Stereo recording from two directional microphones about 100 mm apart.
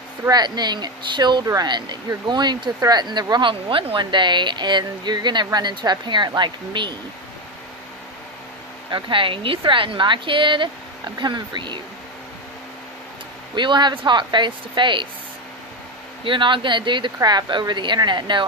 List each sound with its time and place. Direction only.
0.3 s speech: 45° right (ahead or behind)
8.9 s a woman's voice: 55° right (ahead or behind)
13.6 s speech: 50° right (ahead or behind)
16.2 s speech: 55° right (ahead or behind)